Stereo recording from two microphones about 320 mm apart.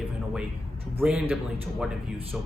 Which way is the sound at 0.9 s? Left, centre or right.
Centre.